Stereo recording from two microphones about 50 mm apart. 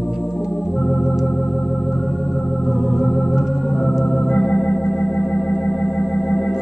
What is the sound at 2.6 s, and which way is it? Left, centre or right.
Organ, centre.